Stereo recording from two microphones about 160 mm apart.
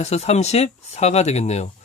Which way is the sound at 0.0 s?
40° left (ahead or behind).